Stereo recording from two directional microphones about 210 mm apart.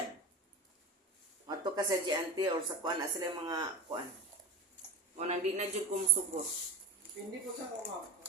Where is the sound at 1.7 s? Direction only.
20° right (ahead or behind).